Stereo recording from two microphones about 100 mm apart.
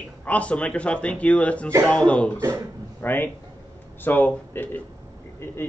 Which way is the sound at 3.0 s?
20° left (ahead or behind).